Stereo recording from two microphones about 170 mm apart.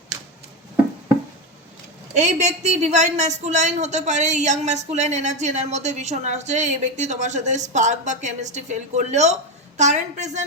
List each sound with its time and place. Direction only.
2.1 s a woman's voice: 45° right (ahead or behind)